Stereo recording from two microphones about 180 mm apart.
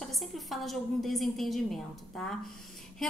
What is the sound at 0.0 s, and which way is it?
A woman's voice, centre (ahead or behind).